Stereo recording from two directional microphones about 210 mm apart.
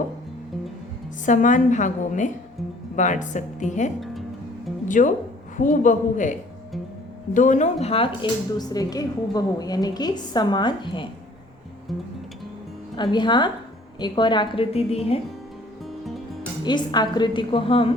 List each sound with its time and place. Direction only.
1.2 s a woman's voice: 35° left (ahead or behind)
7.3 s a woman's voice: 35° left (ahead or behind)
13.0 s a woman's voice: 20° left (ahead or behind)
16.6 s a woman's voice: 20° left (ahead or behind)